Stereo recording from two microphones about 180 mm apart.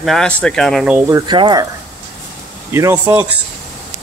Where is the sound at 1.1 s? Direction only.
25° right (ahead or behind).